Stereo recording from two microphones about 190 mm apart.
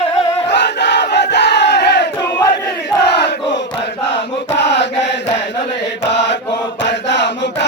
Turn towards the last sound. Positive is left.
turn(degrees=65)  # may be behind; listen again after turning